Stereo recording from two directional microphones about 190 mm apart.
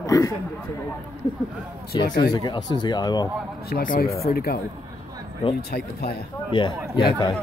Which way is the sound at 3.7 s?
50° left (ahead or behind).